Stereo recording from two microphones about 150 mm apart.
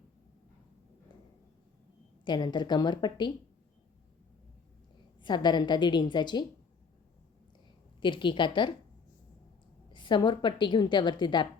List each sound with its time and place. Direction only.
2.2 s a woman's voice: 30° left (ahead or behind)
5.2 s a woman's voice: 30° left (ahead or behind)
8.0 s a woman's voice: 30° left (ahead or behind)
9.9 s a woman's voice: 30° left (ahead or behind)